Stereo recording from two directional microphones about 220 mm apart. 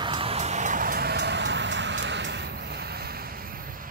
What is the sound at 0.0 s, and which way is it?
Vehicle, 25° right (ahead or behind).